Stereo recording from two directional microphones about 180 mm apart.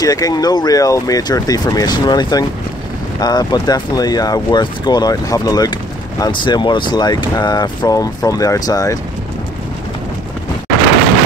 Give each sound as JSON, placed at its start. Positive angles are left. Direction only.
{"t": 0.0, "sound": "speech", "side_deg": 20}